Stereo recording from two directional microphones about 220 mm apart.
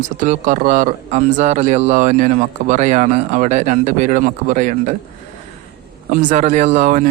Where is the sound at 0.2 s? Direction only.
35° right (ahead or behind).